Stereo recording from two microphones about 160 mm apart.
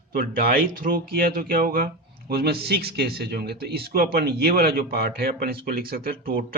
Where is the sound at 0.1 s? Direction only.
65° right (ahead or behind).